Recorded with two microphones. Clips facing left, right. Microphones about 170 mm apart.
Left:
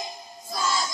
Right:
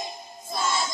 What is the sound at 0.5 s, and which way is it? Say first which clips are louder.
Music: even; 25° right (ahead or behind).